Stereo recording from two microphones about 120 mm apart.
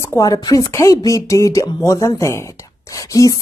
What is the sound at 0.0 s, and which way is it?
A woman's voice, 25° left (ahead or behind).